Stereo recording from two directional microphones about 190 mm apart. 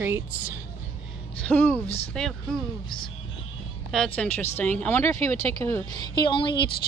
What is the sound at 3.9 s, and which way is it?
A woman's voice, 5° left (ahead or behind).